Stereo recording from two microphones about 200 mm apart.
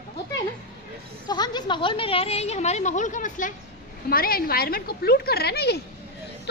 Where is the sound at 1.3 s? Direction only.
20° left (ahead or behind).